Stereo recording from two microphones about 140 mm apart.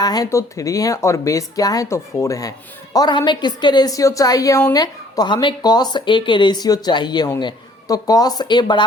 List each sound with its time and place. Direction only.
0.0 s speech: 25° left (ahead or behind)